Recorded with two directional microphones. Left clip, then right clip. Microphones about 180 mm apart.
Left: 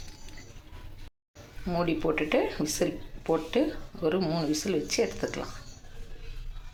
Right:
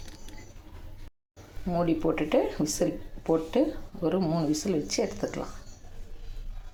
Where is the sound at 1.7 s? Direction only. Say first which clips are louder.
Right 1 dB; 5° right (ahead or behind).